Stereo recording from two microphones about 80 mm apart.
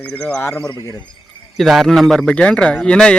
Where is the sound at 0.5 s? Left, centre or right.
Left.